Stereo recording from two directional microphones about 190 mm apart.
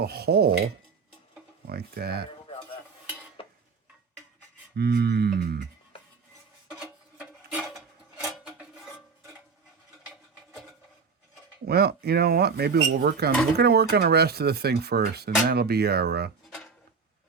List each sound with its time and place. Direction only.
0.0 s rub: 55° right (ahead or behind)
1.6 s rub: 55° right (ahead or behind)
3.4 s stir: 30° left (ahead or behind)
4.8 s rub: 60° right (ahead or behind)
6.7 s a sound: 5° right (ahead or behind)
11.6 s rub: 55° right (ahead or behind)